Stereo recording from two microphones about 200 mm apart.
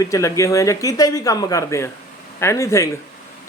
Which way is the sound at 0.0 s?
15° left (ahead or behind).